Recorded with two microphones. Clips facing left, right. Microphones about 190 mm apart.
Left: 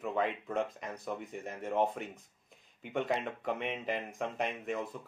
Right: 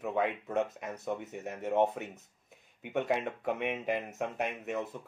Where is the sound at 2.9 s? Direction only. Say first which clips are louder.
Right 2 dB; 5° right (ahead or behind).